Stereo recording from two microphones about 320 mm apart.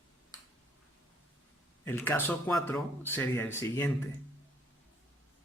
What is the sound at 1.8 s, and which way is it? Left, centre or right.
A man's voice, centre.